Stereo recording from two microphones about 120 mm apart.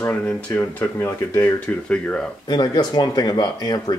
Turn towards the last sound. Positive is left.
turn(degrees=35)  # may be behind; listen again after turning